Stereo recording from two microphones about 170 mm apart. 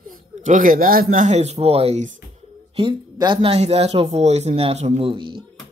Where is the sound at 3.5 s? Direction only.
40° right (ahead or behind).